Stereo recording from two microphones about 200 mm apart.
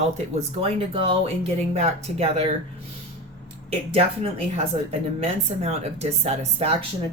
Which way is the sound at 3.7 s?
30° right (ahead or behind).